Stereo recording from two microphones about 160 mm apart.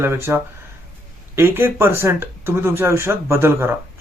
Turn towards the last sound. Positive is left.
turn(degrees=-15)  # may be behind; listen again after turning